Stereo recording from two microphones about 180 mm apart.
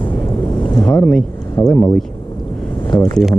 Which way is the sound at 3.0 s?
Centre (ahead or behind).